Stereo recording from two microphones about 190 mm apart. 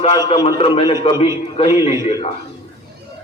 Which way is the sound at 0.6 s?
30° left (ahead or behind).